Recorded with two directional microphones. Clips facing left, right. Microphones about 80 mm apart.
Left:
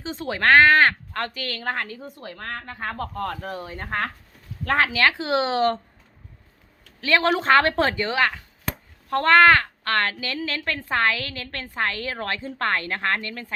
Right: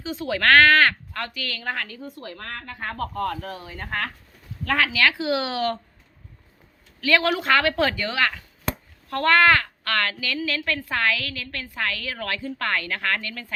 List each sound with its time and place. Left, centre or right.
0.0 s speech: left
1.1 s a woman's voice: left
7.0 s a woman's voice: left